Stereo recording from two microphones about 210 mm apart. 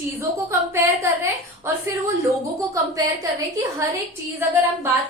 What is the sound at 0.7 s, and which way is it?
A woman's voice, 10° right (ahead or behind).